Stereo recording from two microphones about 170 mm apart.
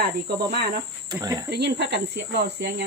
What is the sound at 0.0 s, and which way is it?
Cricket, 75° right (ahead or behind).